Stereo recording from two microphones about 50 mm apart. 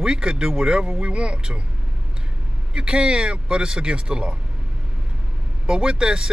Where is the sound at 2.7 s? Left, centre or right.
Centre.